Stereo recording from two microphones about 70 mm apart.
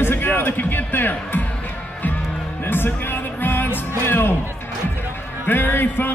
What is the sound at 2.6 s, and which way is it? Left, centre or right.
Music, left.